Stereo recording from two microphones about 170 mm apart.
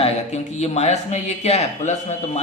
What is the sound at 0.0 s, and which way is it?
Speech, 40° left (ahead or behind).